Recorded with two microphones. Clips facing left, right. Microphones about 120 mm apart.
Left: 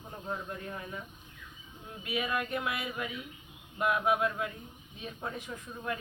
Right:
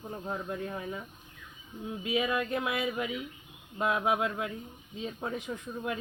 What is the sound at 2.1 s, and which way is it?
Speech, 20° right (ahead or behind).